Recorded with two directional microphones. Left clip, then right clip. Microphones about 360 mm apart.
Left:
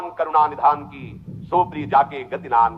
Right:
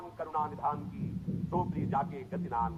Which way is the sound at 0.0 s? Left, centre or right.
Left.